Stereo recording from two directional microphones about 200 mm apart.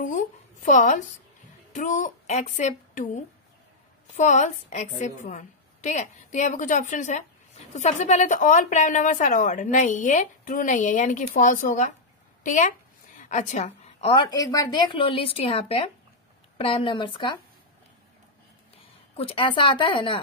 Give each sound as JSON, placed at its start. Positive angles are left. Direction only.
{"t": 0.0, "sound": "a woman's voice", "side_deg": 40}
{"t": 19.1, "sound": "a woman's voice", "side_deg": 25}